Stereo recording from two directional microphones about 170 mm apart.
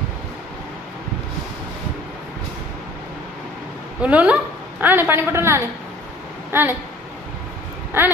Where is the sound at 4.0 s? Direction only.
5° right (ahead or behind).